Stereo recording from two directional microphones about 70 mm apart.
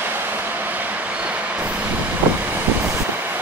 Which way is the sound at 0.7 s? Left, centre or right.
Right.